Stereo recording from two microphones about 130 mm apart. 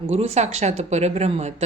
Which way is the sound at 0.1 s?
55° right (ahead or behind).